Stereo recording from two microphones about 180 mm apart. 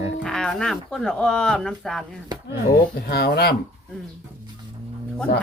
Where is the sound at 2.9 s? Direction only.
60° left (ahead or behind).